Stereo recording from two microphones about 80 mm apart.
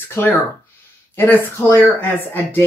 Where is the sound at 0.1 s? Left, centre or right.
Left.